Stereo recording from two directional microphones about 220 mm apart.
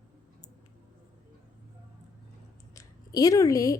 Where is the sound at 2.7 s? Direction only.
15° left (ahead or behind).